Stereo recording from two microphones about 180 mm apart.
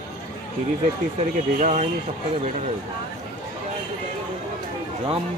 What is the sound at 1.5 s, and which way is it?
Speech, 40° right (ahead or behind).